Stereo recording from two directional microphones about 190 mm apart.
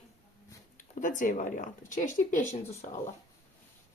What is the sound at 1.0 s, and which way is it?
A woman's voice, 40° left (ahead or behind).